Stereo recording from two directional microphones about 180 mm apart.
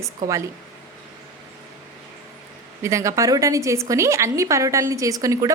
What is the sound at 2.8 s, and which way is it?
A woman's voice, 15° right (ahead or behind).